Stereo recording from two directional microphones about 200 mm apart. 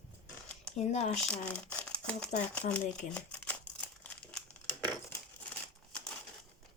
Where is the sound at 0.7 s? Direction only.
35° left (ahead or behind).